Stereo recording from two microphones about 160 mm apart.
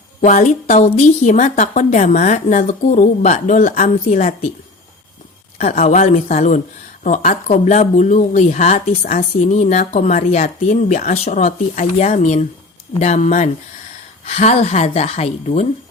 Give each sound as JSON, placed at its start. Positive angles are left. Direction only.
{"t": 0.2, "sound": "speech", "side_deg": 50}
{"t": 5.5, "sound": "speech", "side_deg": 45}